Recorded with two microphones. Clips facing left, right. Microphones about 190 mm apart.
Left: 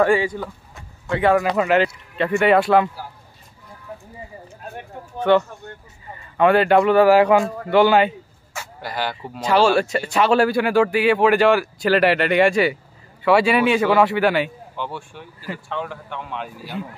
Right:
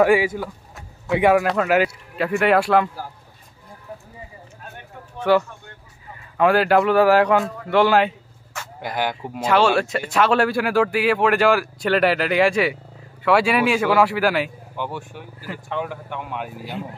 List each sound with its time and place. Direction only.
0.0 s a sound: 10° right (ahead or behind)
1.3 s speech: centre (ahead or behind)
5.3 s speech: 5° right (ahead or behind)
8.8 s speech: 15° right (ahead or behind)
9.3 s speech: centre (ahead or behind)
14.8 s speech: 10° right (ahead or behind)